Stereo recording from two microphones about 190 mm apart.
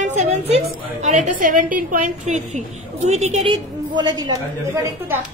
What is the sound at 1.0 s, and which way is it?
A woman's voice, 40° right (ahead or behind).